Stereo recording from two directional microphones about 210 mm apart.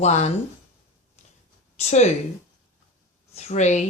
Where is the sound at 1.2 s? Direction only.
30° left (ahead or behind).